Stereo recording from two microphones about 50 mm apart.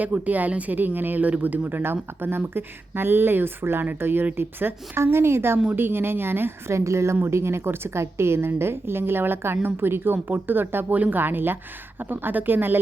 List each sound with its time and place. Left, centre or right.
0.0 s speech: right
5.1 s a woman's voice: right
6.7 s a woman's voice: right
7.3 s a woman's voice: right